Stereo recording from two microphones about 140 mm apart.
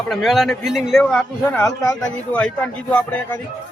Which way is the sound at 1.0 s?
10° left (ahead or behind).